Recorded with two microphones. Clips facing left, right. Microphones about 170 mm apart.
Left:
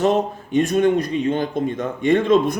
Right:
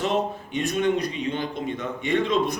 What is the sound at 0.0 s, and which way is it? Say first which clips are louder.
A man's voice: left 6 dB; 45° left (ahead or behind).